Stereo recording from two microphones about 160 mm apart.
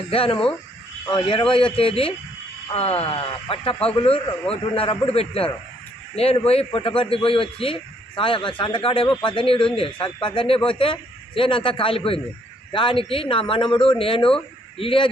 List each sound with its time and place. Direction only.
0.1 s a man's voice: 35° left (ahead or behind)